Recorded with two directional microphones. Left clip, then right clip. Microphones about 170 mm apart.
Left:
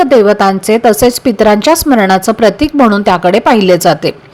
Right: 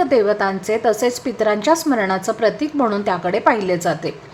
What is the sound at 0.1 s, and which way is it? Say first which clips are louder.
A woman's voice: left 9 dB; 35° left (ahead or behind).